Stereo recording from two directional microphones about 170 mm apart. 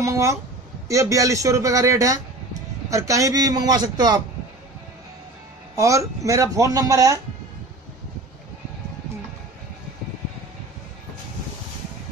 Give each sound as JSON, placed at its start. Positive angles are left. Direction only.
{"t": 0.0, "sound": "a sound", "side_deg": -15}
{"t": 0.8, "sound": "speech", "side_deg": -20}
{"t": 5.8, "sound": "speech", "side_deg": -20}